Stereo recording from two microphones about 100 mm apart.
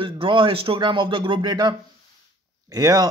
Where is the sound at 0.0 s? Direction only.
55° right (ahead or behind).